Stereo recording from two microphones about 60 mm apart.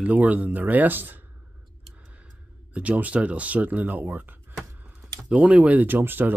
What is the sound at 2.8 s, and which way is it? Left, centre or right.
Speech, right.